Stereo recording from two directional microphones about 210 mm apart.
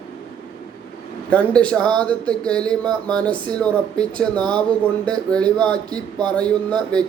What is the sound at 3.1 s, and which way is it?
Speech, 5° left (ahead or behind).